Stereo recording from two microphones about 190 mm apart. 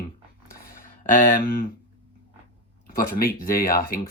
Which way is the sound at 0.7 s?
50° left (ahead or behind).